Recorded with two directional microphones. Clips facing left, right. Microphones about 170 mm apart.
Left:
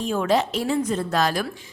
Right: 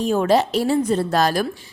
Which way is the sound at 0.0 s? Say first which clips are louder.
Right 4 dB; 40° right (ahead or behind).